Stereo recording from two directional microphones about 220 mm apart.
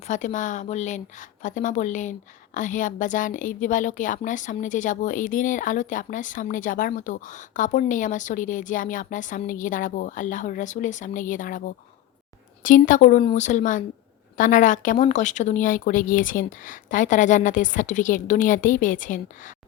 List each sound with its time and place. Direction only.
0.1 s a woman's voice: 35° left (ahead or behind)